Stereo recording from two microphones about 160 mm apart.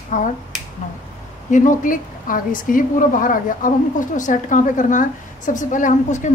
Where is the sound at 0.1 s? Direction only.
50° left (ahead or behind).